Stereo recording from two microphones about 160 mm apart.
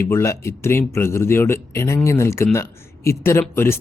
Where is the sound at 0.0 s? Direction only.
15° left (ahead or behind).